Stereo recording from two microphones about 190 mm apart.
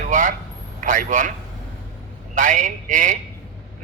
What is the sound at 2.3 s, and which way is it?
Speech, 40° right (ahead or behind).